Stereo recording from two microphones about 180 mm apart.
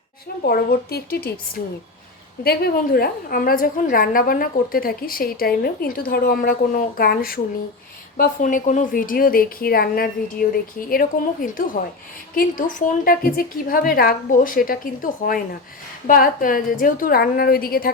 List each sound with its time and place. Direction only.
0.4 s a woman's voice: 60° left (ahead or behind)